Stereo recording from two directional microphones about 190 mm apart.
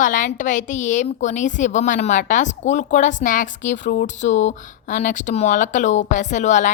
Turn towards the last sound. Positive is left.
turn(degrees=40)  # may be behind; listen again after turning